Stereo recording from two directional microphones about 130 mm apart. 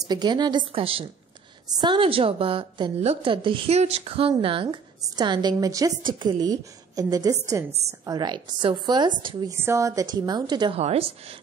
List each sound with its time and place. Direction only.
0.1 s a woman's voice: 35° right (ahead or behind)
9.5 s a woman's voice: 20° right (ahead or behind)
10.8 s a woman's voice: 50° right (ahead or behind)